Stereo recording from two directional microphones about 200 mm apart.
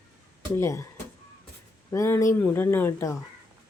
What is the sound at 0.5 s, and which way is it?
Speech, 15° left (ahead or behind).